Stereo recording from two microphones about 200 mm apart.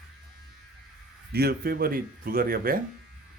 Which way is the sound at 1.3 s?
50° right (ahead or behind).